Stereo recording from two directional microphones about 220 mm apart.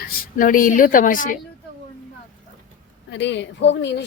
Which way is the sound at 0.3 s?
40° left (ahead or behind).